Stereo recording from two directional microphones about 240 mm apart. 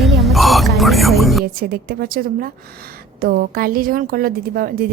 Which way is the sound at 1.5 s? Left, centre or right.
Right.